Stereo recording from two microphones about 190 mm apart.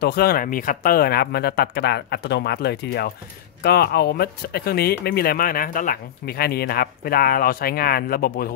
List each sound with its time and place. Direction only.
0.0 s speech: 55° left (ahead or behind)